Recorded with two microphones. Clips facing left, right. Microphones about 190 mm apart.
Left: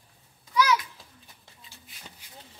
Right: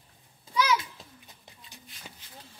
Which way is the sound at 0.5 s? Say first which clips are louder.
Left 2 dB; 25° right (ahead or behind).